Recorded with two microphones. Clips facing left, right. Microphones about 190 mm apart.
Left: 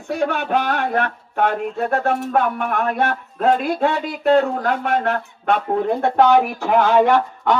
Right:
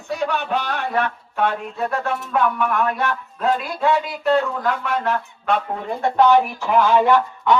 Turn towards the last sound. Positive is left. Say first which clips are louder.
# even
turn(degrees=45)  # may be behind; listen again after turning